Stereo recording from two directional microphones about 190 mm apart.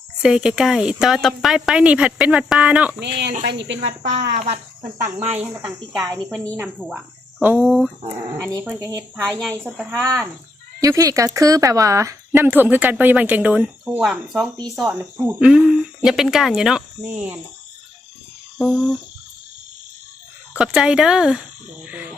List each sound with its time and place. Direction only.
0.2 s a woman's voice: 5° right (ahead or behind)
3.0 s speech: 65° right (ahead or behind)
5.3 s a woman's voice: 5° right (ahead or behind)
9.4 s a woman's voice: centre (ahead or behind)
10.8 s a woman's voice: 20° right (ahead or behind)
18.6 s a woman's voice: centre (ahead or behind)
20.6 s a woman's voice: 5° right (ahead or behind)